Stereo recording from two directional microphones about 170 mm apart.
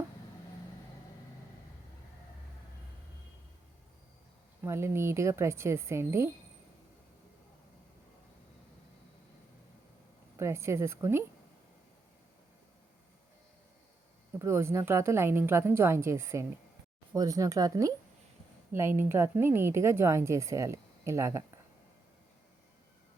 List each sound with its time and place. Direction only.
4.6 s a woman's voice: 15° right (ahead or behind)
10.3 s a woman's voice: 15° right (ahead or behind)
14.3 s a woman's voice: 15° right (ahead or behind)